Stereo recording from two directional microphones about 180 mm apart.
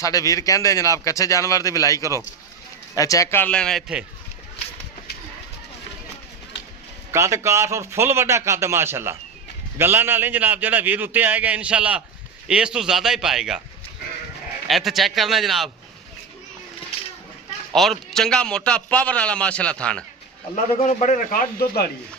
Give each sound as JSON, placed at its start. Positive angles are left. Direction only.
{"t": 0.0, "sound": "a man's voice", "side_deg": 20}
{"t": 7.1, "sound": "a man's voice", "side_deg": -15}
{"t": 14.7, "sound": "a man's voice", "side_deg": 0}
{"t": 17.8, "sound": "a man's voice", "side_deg": 0}
{"t": 20.7, "sound": "a man's voice", "side_deg": 40}